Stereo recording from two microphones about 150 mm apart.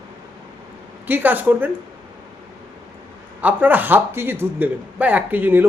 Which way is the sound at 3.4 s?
10° right (ahead or behind).